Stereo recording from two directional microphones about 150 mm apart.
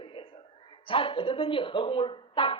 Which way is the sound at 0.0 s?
35° left (ahead or behind).